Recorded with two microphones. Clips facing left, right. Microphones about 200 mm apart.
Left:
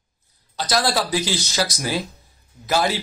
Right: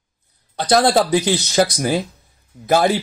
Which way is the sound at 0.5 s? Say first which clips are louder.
Right 7 dB; 55° right (ahead or behind).